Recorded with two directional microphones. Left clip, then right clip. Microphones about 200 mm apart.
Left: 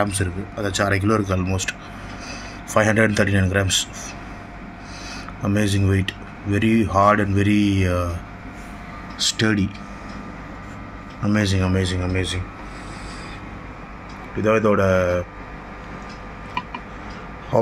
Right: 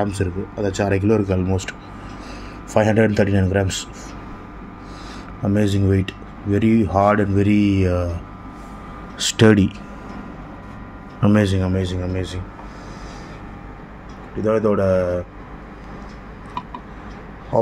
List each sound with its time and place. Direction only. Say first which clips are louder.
0.0 s speech: even; 20° right (ahead or behind)
5.4 s speech: right 2 dB; 30° right (ahead or behind)
9.4 s speech: right 12 dB; 45° right (ahead or behind)
11.2 s speech: right 3 dB; 25° right (ahead or behind); by 12.4 s 5° right (ahead or behind)
14.4 s speech: even; centre (ahead or behind)